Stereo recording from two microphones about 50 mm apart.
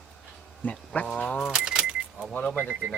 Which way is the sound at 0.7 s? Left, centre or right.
Left.